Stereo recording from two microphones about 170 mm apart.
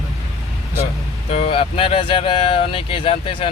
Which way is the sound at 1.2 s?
35° left (ahead or behind).